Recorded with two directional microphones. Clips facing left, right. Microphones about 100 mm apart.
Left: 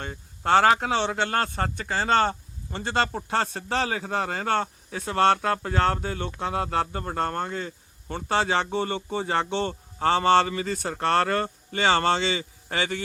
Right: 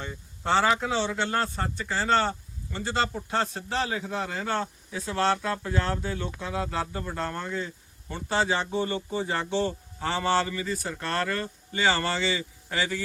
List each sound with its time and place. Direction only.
0.0 s a man's voice: 55° left (ahead or behind)
8.1 s a man's voice: 65° left (ahead or behind)